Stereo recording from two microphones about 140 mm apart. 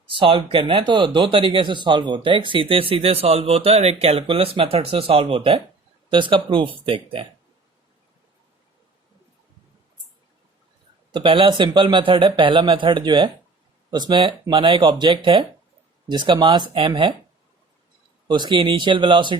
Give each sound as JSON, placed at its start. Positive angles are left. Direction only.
{"t": 0.1, "sound": "speech", "side_deg": -40}
{"t": 11.1, "sound": "speech", "side_deg": -40}
{"t": 18.3, "sound": "speech", "side_deg": -35}